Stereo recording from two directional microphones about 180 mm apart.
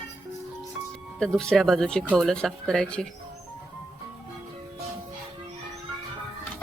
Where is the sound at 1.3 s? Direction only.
5° left (ahead or behind).